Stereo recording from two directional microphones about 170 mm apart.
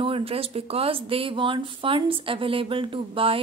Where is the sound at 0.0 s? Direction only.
35° right (ahead or behind).